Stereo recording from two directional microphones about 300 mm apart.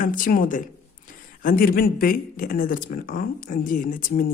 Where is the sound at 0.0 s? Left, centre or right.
Left.